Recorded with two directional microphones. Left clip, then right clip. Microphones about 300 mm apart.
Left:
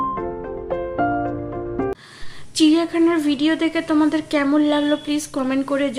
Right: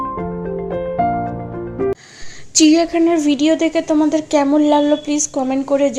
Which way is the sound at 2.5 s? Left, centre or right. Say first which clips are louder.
Right 4 dB; centre.